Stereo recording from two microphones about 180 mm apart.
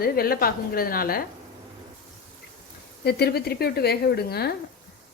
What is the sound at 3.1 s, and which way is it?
Speech, 60° left (ahead or behind).